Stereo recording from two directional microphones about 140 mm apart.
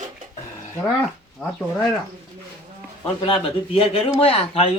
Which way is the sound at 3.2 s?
40° left (ahead or behind).